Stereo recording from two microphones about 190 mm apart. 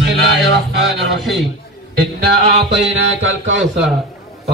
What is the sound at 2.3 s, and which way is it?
A man's voice, 60° right (ahead or behind).